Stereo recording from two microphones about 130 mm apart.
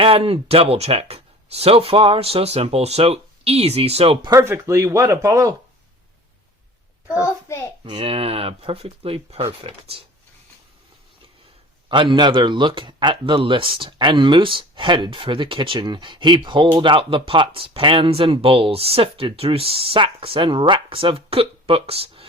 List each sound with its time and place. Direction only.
0.0 s speech: 45° right (ahead or behind)
4.3 s speech: 20° right (ahead or behind)
7.4 s a child's voice: 20° left (ahead or behind)
7.9 s speech: 45° right (ahead or behind)
11.9 s speech: 40° right (ahead or behind)